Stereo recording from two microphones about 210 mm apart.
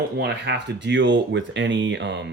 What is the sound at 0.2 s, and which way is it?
Speech, 55° right (ahead or behind).